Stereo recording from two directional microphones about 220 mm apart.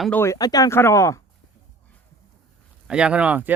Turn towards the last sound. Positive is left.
turn(degrees=-5)  # may be behind; listen again after turning